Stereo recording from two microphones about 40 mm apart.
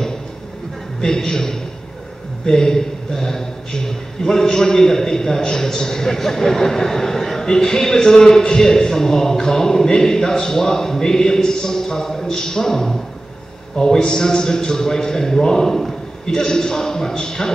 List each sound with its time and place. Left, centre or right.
1.0 s a man's voice: centre